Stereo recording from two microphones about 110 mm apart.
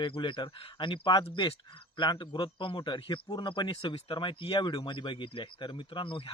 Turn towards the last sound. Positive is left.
turn(degrees=50)  # may be behind; listen again after turning